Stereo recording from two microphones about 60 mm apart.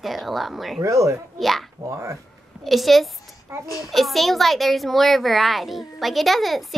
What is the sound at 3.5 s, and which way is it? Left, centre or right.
Speech, right.